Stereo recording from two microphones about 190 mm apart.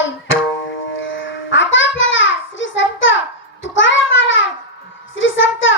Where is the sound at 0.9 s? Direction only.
90° left.